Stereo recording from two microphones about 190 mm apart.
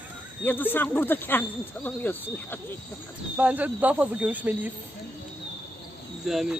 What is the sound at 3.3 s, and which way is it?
Speech, 5° right (ahead or behind).